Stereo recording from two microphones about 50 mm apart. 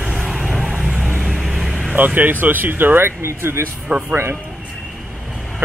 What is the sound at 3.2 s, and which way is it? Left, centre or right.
Speech, right.